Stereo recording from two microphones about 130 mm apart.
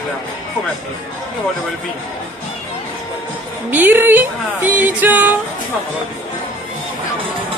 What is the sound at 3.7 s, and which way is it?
A woman's voice, 15° right (ahead or behind).